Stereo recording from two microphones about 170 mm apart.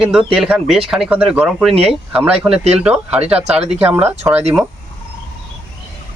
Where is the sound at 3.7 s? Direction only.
35° right (ahead or behind).